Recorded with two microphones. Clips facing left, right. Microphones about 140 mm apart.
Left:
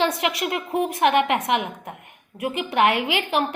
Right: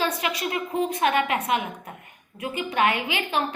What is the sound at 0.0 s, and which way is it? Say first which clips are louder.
A woman's voice: left 4 dB; 75° left (ahead or behind).